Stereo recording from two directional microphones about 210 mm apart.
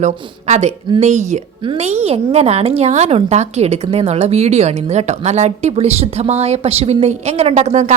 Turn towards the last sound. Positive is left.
turn(degrees=-35)  # may be behind; listen again after turning